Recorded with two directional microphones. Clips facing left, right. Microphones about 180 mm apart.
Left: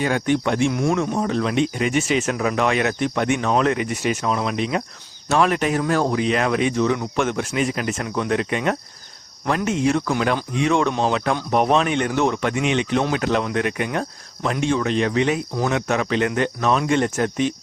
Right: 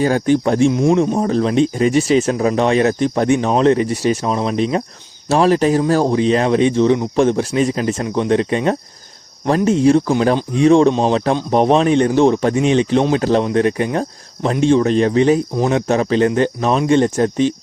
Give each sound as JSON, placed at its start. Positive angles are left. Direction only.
{"t": 0.0, "sound": "speech", "side_deg": -35}
{"t": 0.7, "sound": "speech", "side_deg": -25}